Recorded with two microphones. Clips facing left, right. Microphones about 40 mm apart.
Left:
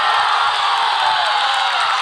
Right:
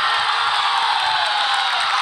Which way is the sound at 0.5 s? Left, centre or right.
Centre.